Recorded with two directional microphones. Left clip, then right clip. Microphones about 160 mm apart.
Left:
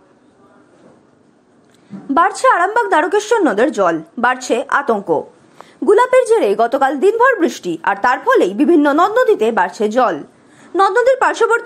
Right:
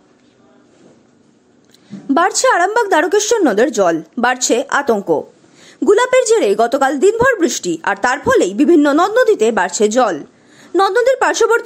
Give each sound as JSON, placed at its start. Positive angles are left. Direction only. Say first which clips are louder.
{"t": 1.9, "sound": "a woman's voice", "louder": "even", "side_deg": -35}
{"t": 4.9, "sound": "a woman's voice", "louder": "right 1 dB", "side_deg": -20}
{"t": 9.3, "sound": "a woman's voice", "louder": "even", "side_deg": -35}